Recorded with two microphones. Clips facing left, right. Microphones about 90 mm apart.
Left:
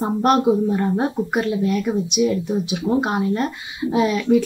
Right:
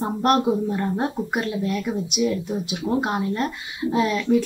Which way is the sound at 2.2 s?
Centre (ahead or behind).